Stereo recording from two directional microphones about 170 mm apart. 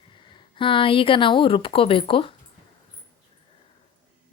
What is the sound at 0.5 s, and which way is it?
Speech, 30° left (ahead or behind).